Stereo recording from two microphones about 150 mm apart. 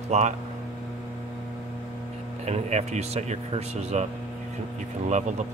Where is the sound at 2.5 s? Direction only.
45° right (ahead or behind).